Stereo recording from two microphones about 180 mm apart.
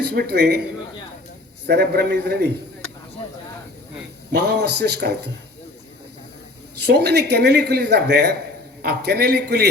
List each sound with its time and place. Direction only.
0.1 s a man's voice: 60° right (ahead or behind)
1.6 s a man's voice: 65° right (ahead or behind)
4.4 s a man's voice: 65° right (ahead or behind)
6.8 s a man's voice: 65° right (ahead or behind)